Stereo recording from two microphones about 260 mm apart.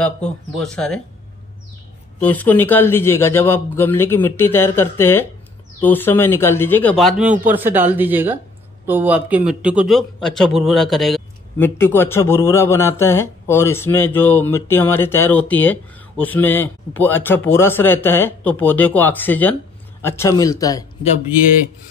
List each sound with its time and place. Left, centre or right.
0.0 s speech: centre
2.1 s a man's voice: centre